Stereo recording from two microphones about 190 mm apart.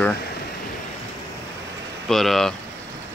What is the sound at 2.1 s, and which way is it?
Speech, centre (ahead or behind).